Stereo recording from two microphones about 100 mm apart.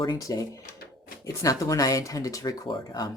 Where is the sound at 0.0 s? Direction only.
35° left (ahead or behind).